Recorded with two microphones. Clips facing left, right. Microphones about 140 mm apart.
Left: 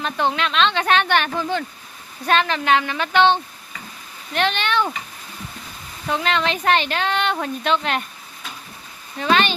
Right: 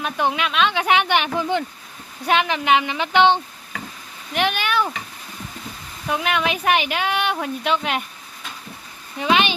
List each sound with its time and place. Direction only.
0.0 s speech: 10° right (ahead or behind)
6.1 s speech: 10° right (ahead or behind)
9.1 s speech: 15° right (ahead or behind)